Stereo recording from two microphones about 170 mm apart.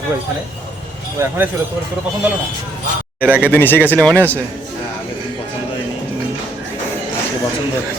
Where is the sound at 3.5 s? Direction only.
10° left (ahead or behind).